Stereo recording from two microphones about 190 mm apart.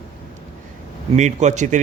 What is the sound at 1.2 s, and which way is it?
Speech, 40° right (ahead or behind).